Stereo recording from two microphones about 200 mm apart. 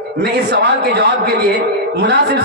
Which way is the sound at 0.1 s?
55° right (ahead or behind).